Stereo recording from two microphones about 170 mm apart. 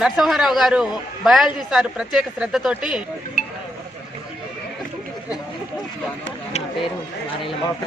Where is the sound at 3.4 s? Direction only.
50° left (ahead or behind).